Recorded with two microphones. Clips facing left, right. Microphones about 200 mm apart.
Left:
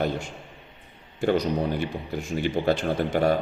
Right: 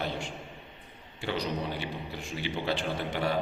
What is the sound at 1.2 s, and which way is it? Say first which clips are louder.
A man's voice: left 9 dB; 45° left (ahead or behind).